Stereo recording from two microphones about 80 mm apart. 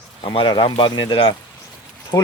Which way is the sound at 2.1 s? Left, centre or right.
Left.